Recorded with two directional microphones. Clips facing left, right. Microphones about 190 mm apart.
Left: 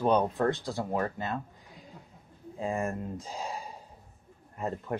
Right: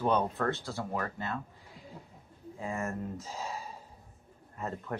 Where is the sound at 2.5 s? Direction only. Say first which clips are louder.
Left 4 dB; 15° left (ahead or behind).